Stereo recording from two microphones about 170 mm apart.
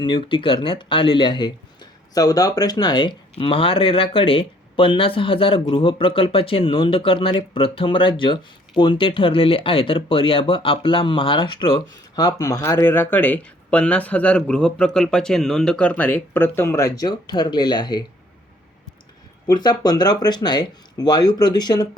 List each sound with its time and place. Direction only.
0.0 s speech: 30° left (ahead or behind)
19.5 s speech: 25° left (ahead or behind)